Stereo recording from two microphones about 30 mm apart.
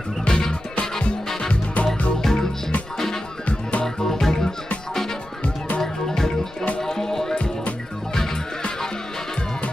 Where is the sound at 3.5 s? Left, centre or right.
Left.